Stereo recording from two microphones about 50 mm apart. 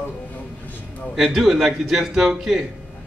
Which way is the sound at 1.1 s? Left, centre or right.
Centre.